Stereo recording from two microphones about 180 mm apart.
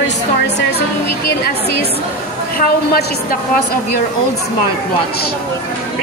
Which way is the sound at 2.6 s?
55° left (ahead or behind).